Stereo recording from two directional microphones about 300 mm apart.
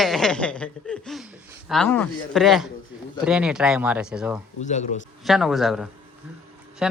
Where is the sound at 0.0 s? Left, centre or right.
Centre.